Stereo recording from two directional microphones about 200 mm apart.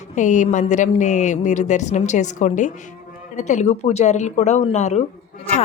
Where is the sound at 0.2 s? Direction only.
40° left (ahead or behind).